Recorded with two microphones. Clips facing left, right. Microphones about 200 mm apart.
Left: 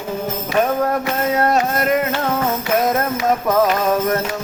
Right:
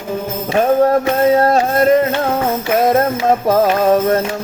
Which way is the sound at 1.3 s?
30° right (ahead or behind).